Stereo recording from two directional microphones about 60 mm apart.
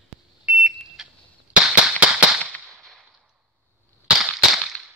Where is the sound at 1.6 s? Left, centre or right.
Centre.